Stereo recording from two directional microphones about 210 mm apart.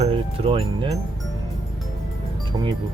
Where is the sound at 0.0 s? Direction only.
25° right (ahead or behind).